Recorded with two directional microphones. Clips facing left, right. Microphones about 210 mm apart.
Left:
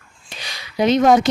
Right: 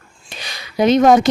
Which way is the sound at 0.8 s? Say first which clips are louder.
Right 2 dB; 50° right (ahead or behind).